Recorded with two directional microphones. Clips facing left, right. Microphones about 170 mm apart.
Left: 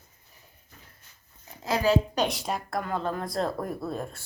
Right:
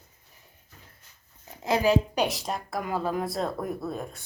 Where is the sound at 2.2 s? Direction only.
Centre (ahead or behind).